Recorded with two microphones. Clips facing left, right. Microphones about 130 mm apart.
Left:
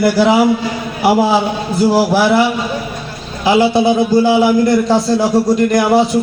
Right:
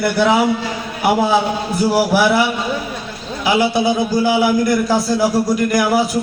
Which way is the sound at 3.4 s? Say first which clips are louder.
Left 4 dB; 20° left (ahead or behind).